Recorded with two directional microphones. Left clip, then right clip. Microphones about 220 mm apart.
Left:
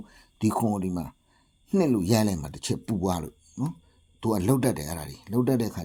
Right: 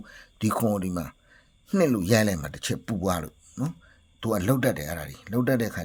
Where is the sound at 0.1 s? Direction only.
15° right (ahead or behind).